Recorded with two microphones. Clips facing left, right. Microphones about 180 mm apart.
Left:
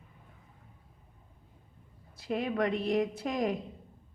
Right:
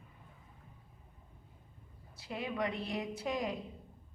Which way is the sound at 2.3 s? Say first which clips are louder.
Left 7 dB; 50° left (ahead or behind).